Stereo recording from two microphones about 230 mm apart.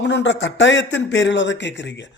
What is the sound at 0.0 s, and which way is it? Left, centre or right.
Speech, left.